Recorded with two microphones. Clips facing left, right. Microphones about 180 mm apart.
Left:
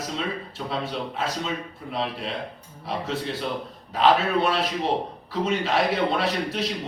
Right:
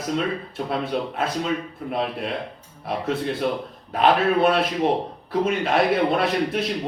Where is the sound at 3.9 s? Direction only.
55° right (ahead or behind).